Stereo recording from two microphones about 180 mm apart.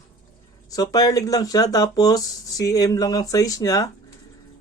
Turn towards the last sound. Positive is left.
turn(degrees=20)  # may be behind; listen again after turning